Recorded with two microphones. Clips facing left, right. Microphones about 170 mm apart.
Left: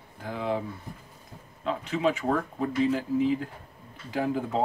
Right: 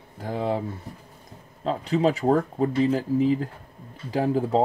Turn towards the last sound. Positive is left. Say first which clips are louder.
# right 5 dB
turn(degrees=-35)  # may be behind; listen again after turning